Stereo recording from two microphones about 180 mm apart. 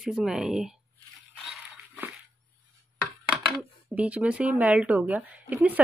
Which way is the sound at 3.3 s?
5° right (ahead or behind).